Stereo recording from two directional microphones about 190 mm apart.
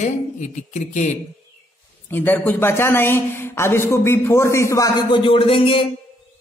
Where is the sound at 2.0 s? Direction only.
10° left (ahead or behind); by 5.9 s 30° left (ahead or behind).